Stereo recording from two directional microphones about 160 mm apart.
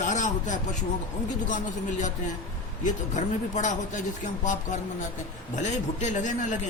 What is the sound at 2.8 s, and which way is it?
Speech, 50° left (ahead or behind).